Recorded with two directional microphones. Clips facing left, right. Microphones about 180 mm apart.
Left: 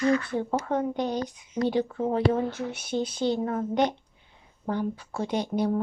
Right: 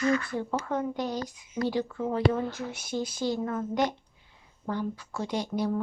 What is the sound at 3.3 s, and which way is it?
Speech, 30° left (ahead or behind).